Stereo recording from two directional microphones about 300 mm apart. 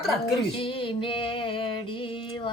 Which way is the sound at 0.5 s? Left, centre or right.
Centre.